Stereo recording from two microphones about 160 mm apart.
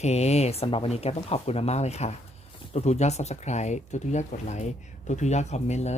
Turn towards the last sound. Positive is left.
turn(degrees=45)  # may be behind; listen again after turning